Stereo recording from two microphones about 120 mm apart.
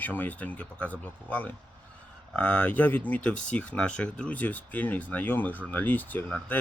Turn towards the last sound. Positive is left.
turn(degrees=15)  # may be behind; listen again after turning